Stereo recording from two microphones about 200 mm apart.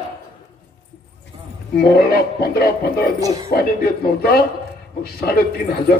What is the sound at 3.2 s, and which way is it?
Speech, 20° right (ahead or behind).